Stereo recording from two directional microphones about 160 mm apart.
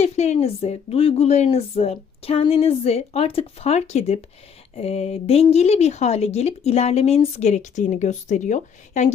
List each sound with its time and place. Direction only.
0.0 s speech: 45° left (ahead or behind)